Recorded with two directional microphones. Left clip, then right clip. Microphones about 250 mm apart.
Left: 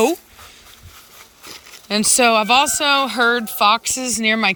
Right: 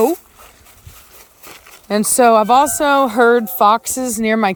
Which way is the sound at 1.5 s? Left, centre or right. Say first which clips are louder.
Right 3 dB; centre.